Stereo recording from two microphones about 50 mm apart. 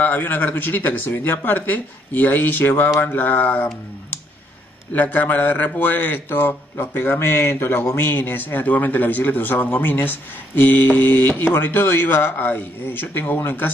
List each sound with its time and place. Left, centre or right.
0.0 s a man's voice: left
4.9 s a man's voice: left
7.2 s speech: left
8.1 s a man's voice: left